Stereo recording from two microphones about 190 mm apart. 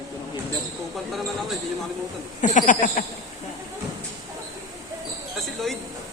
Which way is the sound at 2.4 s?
40° left (ahead or behind).